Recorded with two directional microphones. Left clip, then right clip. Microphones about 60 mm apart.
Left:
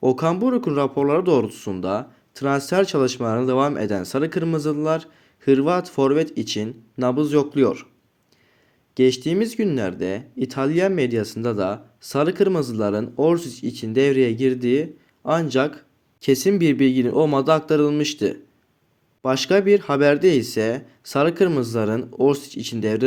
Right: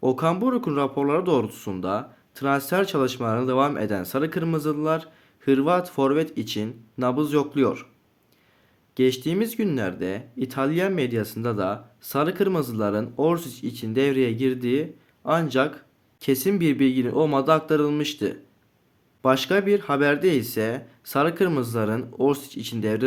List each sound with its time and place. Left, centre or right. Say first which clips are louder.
0.0 s speech: left 3 dB; left
7.0 s speech: left 3 dB; centre
9.0 s speech: left 4 dB; left